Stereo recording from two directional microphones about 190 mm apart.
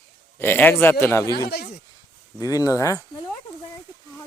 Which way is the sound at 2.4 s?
20° left (ahead or behind).